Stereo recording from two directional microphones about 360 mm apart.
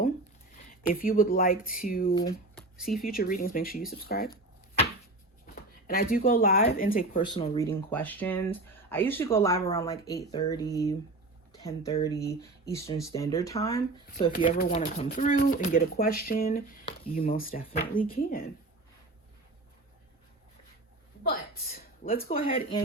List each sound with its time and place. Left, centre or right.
1.0 s speech: left
2.1 s speech: centre
3.1 s speech: left
5.5 s speech: left; by 14.3 s centre
14.3 s speech: left
21.2 s a woman's voice: left